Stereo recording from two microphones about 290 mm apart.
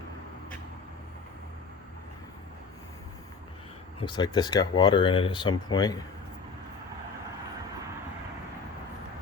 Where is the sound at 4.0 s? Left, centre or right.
Centre.